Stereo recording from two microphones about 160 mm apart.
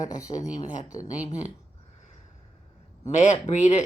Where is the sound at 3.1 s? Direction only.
45° left (ahead or behind).